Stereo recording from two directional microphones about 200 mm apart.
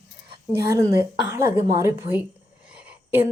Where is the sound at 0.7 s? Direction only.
15° right (ahead or behind).